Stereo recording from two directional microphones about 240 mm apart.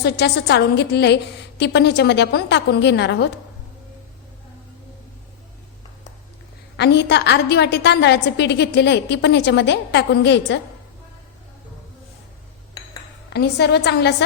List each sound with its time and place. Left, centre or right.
0.0 s a woman's voice: left
6.7 s a woman's voice: left
13.3 s a woman's voice: left